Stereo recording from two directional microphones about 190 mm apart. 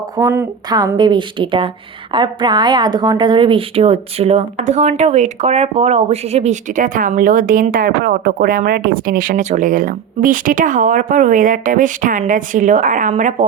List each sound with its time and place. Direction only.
0.2 s a woman's voice: 15° right (ahead or behind); by 13.3 s 40° right (ahead or behind)